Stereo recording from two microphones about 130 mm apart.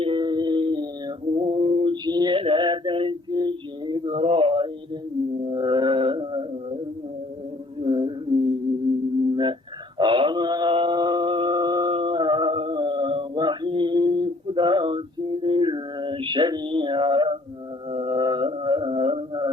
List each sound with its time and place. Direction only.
0.0 s female singing: 40° right (ahead or behind)
5.5 s music: 35° right (ahead or behind)
7.8 s a sound: 40° right (ahead or behind)
9.3 s a sound: 35° right (ahead or behind)
10.0 s mantra: 40° right (ahead or behind)
17.9 s music: 40° right (ahead or behind)